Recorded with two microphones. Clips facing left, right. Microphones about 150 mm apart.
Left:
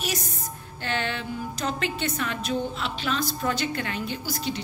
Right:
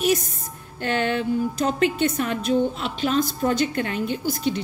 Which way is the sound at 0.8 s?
45° right (ahead or behind).